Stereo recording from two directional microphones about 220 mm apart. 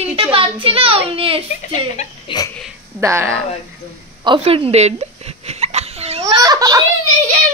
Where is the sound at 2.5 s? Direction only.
Centre (ahead or behind).